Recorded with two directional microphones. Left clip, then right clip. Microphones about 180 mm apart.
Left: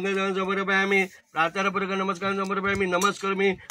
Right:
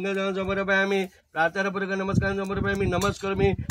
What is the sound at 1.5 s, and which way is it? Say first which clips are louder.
A man's voice: left 1 dB; 40° right (ahead or behind).